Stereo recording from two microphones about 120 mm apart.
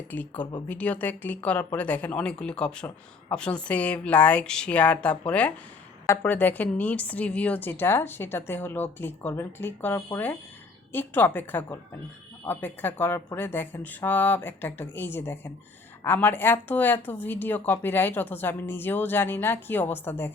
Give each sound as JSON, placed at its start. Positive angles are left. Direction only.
{"t": 0.1, "sound": "speech", "side_deg": 15}